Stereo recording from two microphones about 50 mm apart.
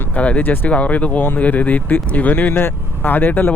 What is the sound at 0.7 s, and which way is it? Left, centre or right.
Speech, left.